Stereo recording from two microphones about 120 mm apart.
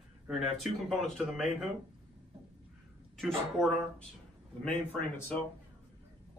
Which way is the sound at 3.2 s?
5° left (ahead or behind).